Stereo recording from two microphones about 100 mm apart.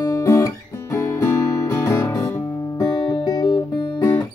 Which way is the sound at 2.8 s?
40° left (ahead or behind).